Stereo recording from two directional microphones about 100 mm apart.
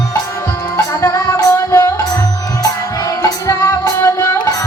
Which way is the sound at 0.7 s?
35° left (ahead or behind).